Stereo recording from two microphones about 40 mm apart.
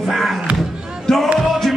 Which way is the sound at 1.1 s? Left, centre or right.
Centre.